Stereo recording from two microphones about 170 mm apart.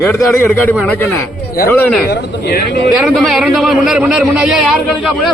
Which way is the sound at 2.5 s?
65° left (ahead or behind).